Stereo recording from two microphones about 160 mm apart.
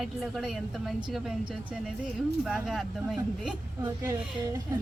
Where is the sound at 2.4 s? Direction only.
Centre (ahead or behind).